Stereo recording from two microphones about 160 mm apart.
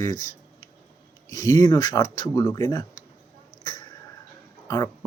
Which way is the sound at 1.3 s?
20° left (ahead or behind).